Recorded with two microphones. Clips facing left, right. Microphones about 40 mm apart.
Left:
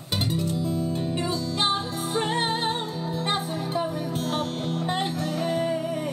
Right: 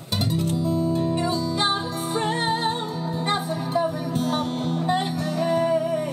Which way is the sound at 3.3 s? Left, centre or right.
Centre.